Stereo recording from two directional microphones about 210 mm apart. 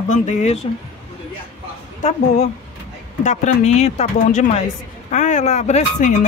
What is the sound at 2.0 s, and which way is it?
Speech, 30° left (ahead or behind).